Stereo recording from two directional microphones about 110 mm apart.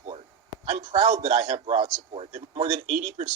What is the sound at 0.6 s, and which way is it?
Speech, 80° right.